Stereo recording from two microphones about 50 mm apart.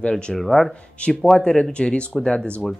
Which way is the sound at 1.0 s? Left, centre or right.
Left.